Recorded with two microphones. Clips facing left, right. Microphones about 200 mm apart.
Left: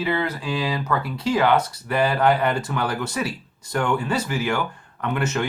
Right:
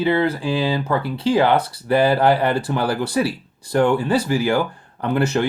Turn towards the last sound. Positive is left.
turn(degrees=-35)  # may be behind; listen again after turning